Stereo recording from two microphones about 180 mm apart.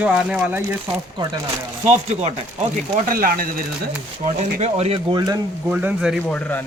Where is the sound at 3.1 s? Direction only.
50° right (ahead or behind).